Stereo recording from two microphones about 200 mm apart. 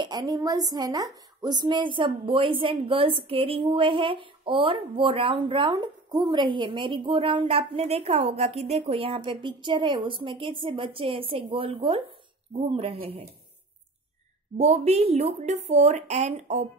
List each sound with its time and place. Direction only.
0.0 s a woman's voice: 20° right (ahead or behind)
14.6 s speech: 35° right (ahead or behind)